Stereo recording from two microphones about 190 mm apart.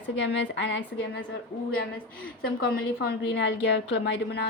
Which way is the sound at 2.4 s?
55° left (ahead or behind).